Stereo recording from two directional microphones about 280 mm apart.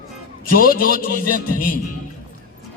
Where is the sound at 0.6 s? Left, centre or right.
Left.